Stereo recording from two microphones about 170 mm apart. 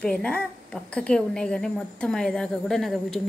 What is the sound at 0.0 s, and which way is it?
A woman's voice, 5° left (ahead or behind).